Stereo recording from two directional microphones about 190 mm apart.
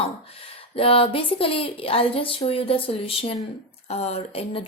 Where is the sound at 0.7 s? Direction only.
30° left (ahead or behind).